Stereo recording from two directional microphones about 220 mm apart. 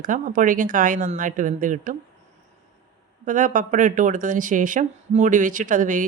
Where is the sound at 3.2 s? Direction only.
35° right (ahead or behind).